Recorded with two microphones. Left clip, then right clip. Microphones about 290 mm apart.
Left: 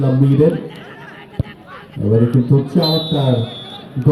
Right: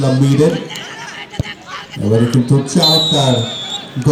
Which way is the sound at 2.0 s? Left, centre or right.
Right.